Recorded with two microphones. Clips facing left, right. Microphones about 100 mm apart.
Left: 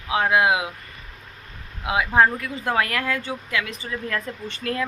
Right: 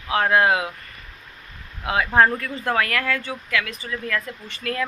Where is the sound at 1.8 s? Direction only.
15° left (ahead or behind).